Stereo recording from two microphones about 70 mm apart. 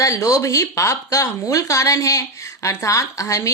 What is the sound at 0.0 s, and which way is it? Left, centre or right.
Speech, left.